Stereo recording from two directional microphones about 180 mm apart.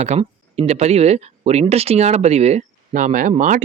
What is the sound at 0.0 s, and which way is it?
Speech, 35° right (ahead or behind).